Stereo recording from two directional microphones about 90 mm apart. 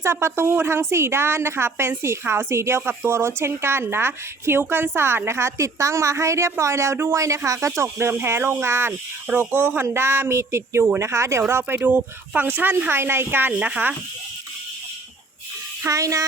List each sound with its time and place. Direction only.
0.0 s speech: 30° right (ahead or behind)
15.9 s speech: 35° right (ahead or behind)